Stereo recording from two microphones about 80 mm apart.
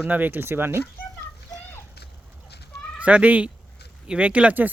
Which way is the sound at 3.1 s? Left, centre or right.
Centre.